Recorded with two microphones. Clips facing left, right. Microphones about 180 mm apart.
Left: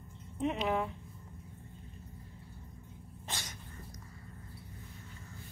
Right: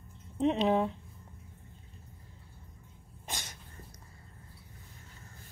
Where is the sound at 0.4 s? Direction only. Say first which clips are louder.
Right 5 dB; 30° right (ahead or behind).